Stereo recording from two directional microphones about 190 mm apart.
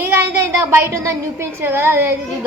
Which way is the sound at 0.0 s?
10° right (ahead or behind).